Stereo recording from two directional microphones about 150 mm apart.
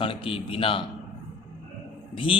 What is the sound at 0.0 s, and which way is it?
Speech, 35° left (ahead or behind).